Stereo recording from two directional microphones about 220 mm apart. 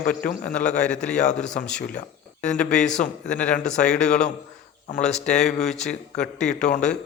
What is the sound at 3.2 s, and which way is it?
Speech, 5° left (ahead or behind).